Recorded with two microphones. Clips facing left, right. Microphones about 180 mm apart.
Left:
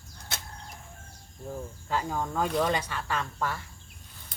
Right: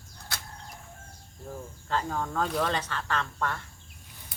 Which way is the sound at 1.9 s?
10° left (ahead or behind).